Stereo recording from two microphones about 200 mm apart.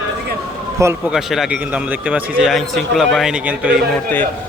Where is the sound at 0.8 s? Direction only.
15° right (ahead or behind).